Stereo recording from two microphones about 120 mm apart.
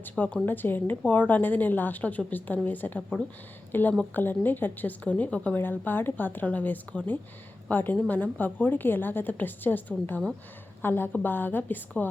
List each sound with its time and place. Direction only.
0.0 s speech: 15° left (ahead or behind)